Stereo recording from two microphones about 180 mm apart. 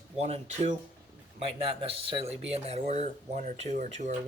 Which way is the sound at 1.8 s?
30° right (ahead or behind).